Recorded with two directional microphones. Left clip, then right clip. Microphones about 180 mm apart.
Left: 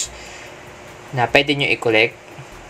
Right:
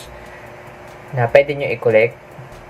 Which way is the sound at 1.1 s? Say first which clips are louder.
Right 2 dB; 50° left (ahead or behind).